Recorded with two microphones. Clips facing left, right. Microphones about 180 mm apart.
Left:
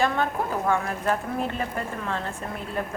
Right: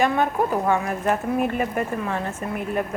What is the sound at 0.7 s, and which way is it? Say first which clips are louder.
Speech: right 3 dB; 15° right (ahead or behind).